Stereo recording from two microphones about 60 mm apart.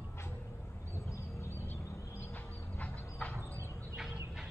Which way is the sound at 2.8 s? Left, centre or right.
Left.